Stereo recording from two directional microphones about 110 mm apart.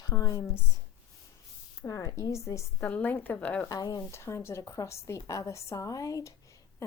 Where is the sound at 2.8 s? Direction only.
15° left (ahead or behind).